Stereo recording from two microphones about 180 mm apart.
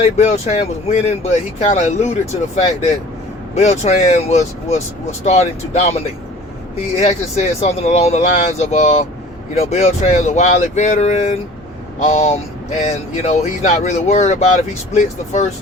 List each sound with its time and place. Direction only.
0.0 s speech: 40° left (ahead or behind)
7.0 s speech: 35° left (ahead or behind)